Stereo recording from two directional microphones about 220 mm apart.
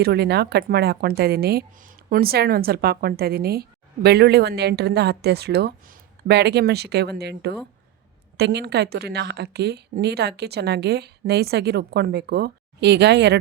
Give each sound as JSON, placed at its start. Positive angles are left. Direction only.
{"t": 0.0, "sound": "a woman's voice", "side_deg": -45}